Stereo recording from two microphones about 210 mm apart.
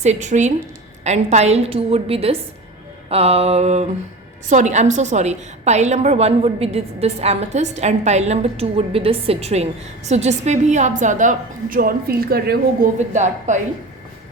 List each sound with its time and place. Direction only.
0.0 s a woman's voice: 35° right (ahead or behind)